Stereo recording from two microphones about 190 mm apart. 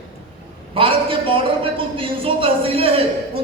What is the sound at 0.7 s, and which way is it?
A man's voice, 30° right (ahead or behind).